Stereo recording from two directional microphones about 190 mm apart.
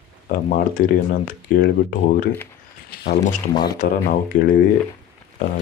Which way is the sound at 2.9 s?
55° left (ahead or behind).